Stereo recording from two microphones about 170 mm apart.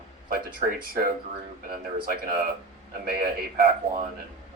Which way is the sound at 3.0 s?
65° right (ahead or behind).